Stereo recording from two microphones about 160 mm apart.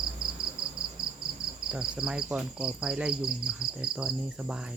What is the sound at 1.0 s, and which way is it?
Cricket, 30° right (ahead or behind).